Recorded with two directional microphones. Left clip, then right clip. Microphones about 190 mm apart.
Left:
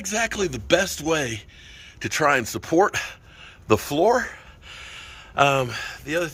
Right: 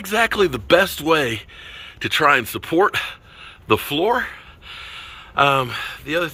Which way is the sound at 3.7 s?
25° left (ahead or behind).